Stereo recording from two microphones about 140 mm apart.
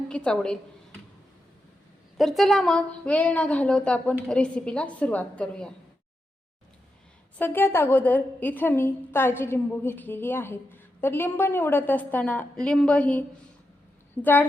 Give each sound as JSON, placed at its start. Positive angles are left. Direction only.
{"t": 0.1, "sound": "a woman's voice", "side_deg": 5}
{"t": 2.1, "sound": "a woman's voice", "side_deg": 0}
{"t": 7.3, "sound": "a woman's voice", "side_deg": 15}